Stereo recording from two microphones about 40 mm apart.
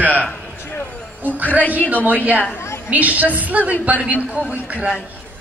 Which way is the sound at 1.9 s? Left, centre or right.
Right.